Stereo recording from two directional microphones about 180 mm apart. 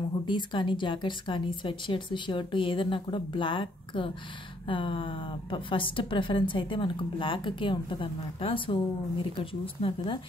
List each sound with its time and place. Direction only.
0.3 s a woman's voice: 25° left (ahead or behind)